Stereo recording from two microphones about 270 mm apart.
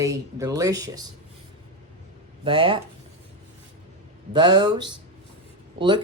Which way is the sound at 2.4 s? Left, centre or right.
Centre.